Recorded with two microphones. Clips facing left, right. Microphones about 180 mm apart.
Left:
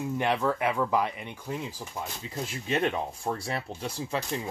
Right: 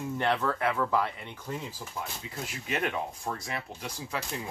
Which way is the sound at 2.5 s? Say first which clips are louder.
Left 4 dB; 30° left (ahead or behind).